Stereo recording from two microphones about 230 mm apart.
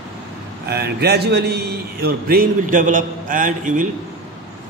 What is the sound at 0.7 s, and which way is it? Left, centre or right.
A man's voice, right.